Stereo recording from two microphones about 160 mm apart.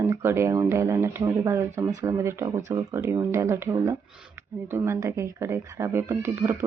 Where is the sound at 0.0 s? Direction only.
15° right (ahead or behind).